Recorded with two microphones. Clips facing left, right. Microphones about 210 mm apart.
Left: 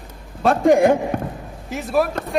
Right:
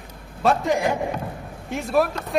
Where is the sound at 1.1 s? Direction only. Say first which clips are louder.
Left 6 dB; 55° left (ahead or behind).